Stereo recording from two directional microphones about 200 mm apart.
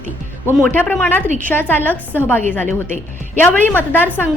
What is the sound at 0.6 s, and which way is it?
A woman's voice, 10° left (ahead or behind).